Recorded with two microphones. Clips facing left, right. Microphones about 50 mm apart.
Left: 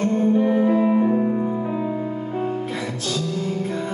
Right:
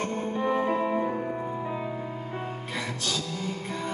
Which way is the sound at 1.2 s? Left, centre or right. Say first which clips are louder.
Left 9 dB; centre.